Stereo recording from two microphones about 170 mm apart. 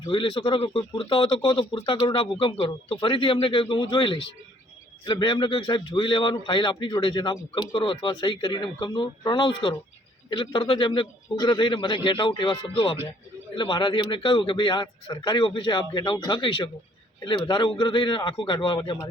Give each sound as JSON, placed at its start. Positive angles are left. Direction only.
{"t": 0.1, "sound": "a man's voice", "side_deg": 30}